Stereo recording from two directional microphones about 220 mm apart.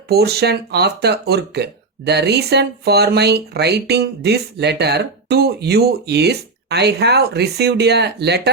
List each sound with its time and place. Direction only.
0.1 s speech: 45° right (ahead or behind)